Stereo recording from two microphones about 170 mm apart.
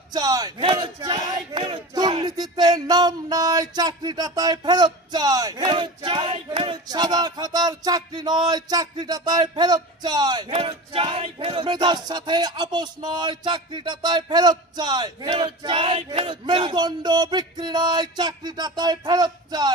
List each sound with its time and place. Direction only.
0.1 s speech: 25° right (ahead or behind)